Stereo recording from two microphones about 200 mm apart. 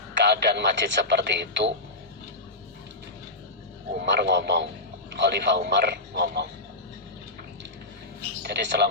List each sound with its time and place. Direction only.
0.2 s speech: 60° right (ahead or behind)
4.0 s speech: 60° right (ahead or behind)
8.4 s a man's voice: 55° right (ahead or behind)